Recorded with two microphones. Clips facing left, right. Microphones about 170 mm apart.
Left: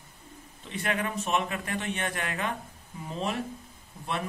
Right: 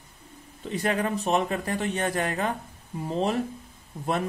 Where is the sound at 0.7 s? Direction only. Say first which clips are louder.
Right 5 dB; 35° right (ahead or behind).